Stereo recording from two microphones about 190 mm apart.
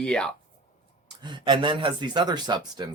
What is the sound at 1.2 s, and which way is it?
Speech, 25° right (ahead or behind).